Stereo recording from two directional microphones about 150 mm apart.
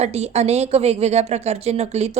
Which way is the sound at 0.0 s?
45° right (ahead or behind).